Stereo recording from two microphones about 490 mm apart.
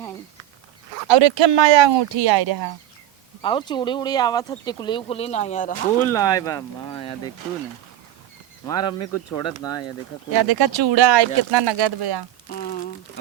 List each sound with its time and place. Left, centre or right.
1.0 s speech: right
3.4 s speech: centre
8.6 s speech: centre
10.3 s speech: right
12.5 s a sound: centre